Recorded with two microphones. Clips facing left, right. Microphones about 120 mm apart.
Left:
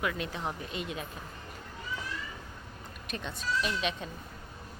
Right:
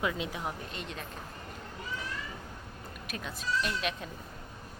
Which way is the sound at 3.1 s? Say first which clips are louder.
Left 1 dB; 5° right (ahead or behind).